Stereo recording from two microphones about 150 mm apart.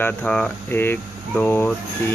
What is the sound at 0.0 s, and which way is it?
Speech, 5° left (ahead or behind).